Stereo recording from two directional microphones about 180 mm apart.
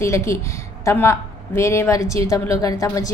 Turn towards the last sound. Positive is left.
turn(degrees=20)  # may be behind; listen again after turning